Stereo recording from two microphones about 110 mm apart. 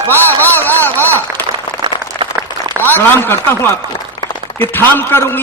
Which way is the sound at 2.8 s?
20° left (ahead or behind).